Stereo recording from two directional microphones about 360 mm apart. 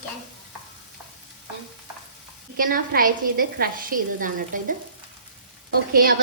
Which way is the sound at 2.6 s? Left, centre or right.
Right.